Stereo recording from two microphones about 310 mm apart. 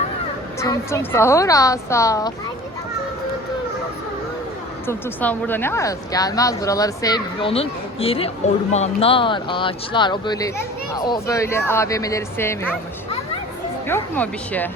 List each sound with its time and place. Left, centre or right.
0.6 s a woman's voice: centre
4.9 s a woman's voice: centre
13.8 s speech: centre